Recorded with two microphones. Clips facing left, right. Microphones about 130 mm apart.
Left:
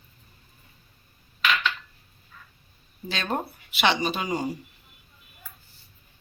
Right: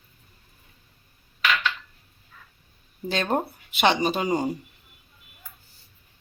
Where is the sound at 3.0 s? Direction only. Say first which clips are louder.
Right 4 dB; 45° right (ahead or behind).